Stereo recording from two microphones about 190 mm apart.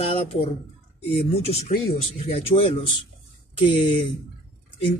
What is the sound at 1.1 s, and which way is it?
A man's voice, 35° left (ahead or behind).